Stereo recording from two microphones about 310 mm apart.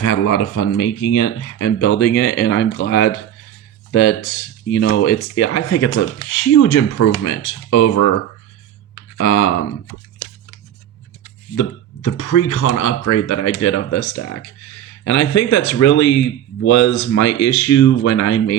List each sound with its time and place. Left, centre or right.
0.0 s speech: left
6.4 s speech: left
9.1 s speech: left
12.0 s speech: left